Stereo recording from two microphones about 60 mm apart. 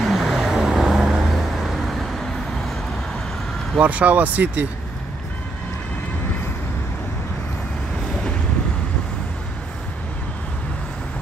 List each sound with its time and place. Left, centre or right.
0.0 s vehicle: centre
3.7 s speech: right